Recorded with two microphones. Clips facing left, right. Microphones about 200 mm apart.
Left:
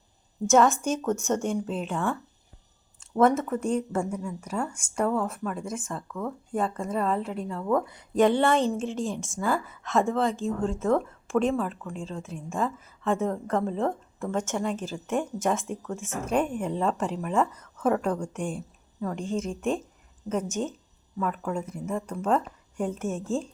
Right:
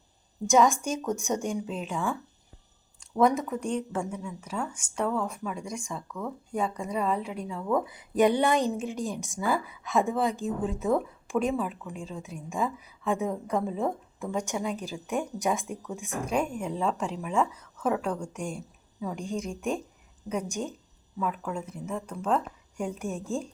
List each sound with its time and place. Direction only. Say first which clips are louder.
0.4 s speech: left 2 dB; 5° left (ahead or behind)
0.7 s a woman's voice: left 3 dB; 10° right (ahead or behind)
1.4 s speech: left 3 dB; centre (ahead or behind)
3.2 s speech: left 2 dB; centre (ahead or behind)
8.2 s a woman's voice: left 1 dB; 15° right (ahead or behind)
9.8 s speech: left 2 dB; centre (ahead or behind)
17.7 s speech: left 3 dB; 5° left (ahead or behind)
20.2 s a woman's voice: left 3 dB; 10° right (ahead or behind)
21.2 s speech: left 2 dB; centre (ahead or behind)